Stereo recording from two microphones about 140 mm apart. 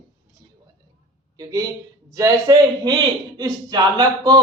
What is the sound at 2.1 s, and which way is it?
A man's voice, 25° right (ahead or behind).